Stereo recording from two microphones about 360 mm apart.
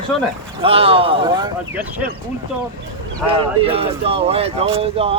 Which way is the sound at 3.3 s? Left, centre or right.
Centre.